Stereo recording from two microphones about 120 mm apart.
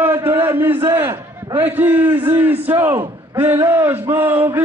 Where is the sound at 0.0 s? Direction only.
20° right (ahead or behind).